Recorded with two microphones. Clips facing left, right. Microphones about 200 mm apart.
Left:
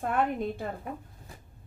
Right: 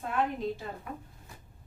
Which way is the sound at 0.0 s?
55° left (ahead or behind).